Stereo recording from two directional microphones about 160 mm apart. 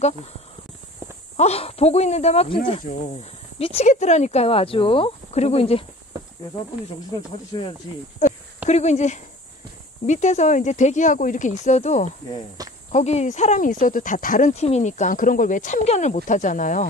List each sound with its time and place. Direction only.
1.3 s speech: 45° left (ahead or behind)
7.5 s speech: 30° left (ahead or behind)
8.6 s speech: 45° left (ahead or behind)
12.6 s cricket: 25° right (ahead or behind)
12.9 s speech: 45° left (ahead or behind)
14.5 s speech: 40° left (ahead or behind)